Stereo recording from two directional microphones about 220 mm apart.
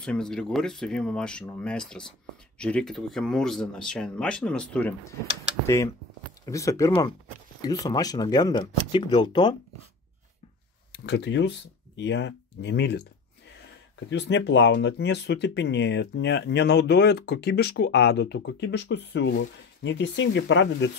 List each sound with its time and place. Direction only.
0.0 s speech: 5° left (ahead or behind)
6.4 s speech: 15° left (ahead or behind)
11.1 s speech: 50° left (ahead or behind)